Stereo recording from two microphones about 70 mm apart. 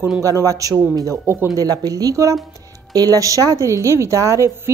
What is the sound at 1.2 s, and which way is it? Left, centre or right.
Speech, right.